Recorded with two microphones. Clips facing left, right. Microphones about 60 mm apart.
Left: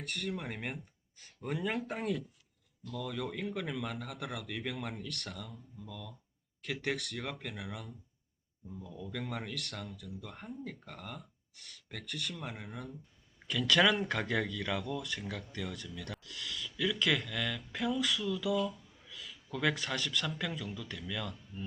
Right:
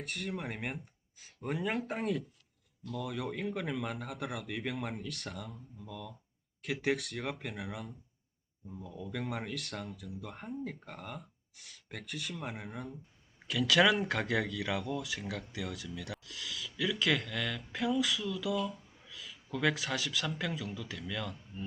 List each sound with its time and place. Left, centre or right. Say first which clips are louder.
0.0 s speech: even; centre
8.7 s a man's voice: right 1 dB; centre